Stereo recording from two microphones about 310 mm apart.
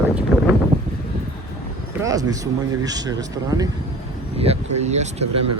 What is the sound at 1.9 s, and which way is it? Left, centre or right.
Speech, centre.